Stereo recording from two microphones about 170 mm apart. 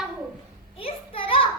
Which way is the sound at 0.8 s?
35° left (ahead or behind).